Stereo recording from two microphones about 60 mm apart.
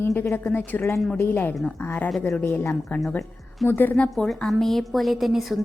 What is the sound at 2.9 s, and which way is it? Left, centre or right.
Speech, left.